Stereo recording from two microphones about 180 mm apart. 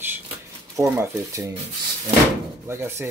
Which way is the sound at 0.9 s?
15° right (ahead or behind).